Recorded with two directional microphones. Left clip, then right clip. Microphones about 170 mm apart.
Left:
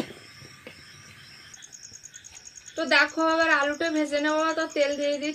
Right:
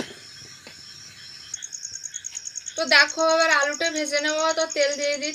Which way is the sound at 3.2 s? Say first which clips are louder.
Right 3 dB; 25° left (ahead or behind).